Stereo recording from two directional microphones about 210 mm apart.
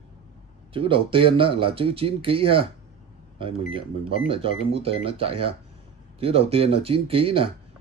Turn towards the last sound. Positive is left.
turn(degrees=-25)  # may be behind; listen again after turning